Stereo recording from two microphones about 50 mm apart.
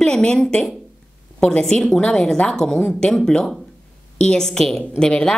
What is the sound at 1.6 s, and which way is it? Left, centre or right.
A woman's voice, centre.